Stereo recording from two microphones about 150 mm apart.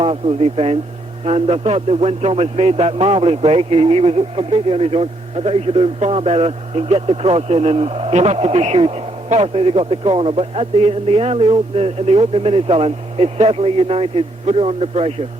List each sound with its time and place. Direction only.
0.0 s a man's voice: 40° right (ahead or behind)